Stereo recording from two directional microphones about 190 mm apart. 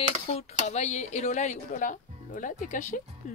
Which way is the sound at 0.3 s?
35° left (ahead or behind).